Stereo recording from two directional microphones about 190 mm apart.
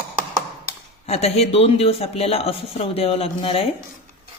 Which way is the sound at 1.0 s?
35° left (ahead or behind).